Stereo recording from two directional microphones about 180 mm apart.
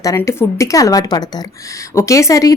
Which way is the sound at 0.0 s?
15° left (ahead or behind).